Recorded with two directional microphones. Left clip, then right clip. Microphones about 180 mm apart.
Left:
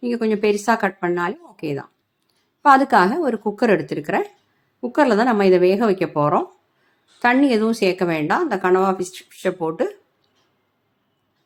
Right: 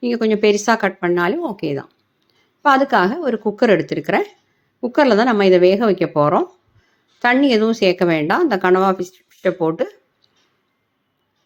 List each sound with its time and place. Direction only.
0.0 s speech: 15° right (ahead or behind)
2.6 s a woman's voice: centre (ahead or behind)
4.0 s speech: 20° right (ahead or behind)
5.3 s a woman's voice: 5° right (ahead or behind)